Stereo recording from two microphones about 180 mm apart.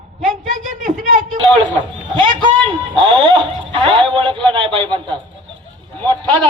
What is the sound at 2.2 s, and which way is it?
Speech, 25° right (ahead or behind).